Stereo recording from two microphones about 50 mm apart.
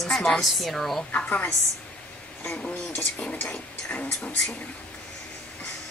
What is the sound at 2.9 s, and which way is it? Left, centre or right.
Speech, left.